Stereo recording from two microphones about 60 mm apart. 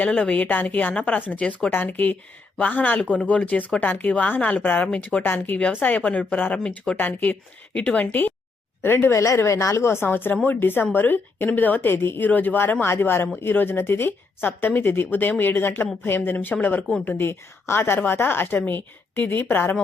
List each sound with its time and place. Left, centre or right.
0.0 s a woman's voice: centre
4.6 s a woman's voice: left
6.6 s speech: centre
6.9 s a woman's voice: left
9.0 s a woman's voice: left
12.3 s a woman's voice: left